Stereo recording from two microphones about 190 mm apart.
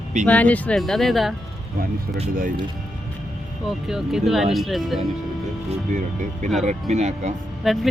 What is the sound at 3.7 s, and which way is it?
Speech, centre (ahead or behind).